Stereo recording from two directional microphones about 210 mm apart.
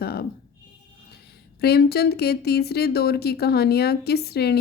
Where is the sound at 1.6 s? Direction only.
50° left (ahead or behind).